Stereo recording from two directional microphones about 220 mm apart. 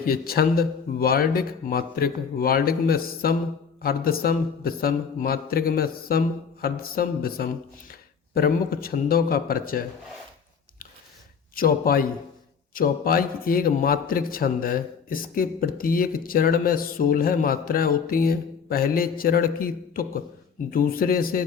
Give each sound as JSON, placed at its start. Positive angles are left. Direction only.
{"t": 0.0, "sound": "speech", "side_deg": 40}
{"t": 11.5, "sound": "speech", "side_deg": 40}